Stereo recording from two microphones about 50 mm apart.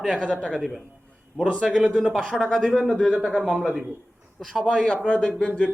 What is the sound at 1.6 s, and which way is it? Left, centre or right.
Speech, centre.